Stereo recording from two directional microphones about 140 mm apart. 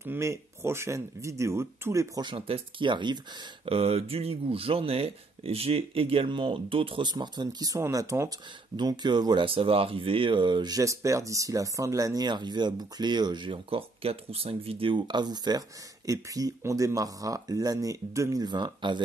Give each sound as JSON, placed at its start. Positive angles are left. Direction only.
{"t": 0.0, "sound": "speech", "side_deg": -20}
{"t": 2.2, "sound": "speech", "side_deg": -40}
{"t": 3.6, "sound": "speech", "side_deg": -45}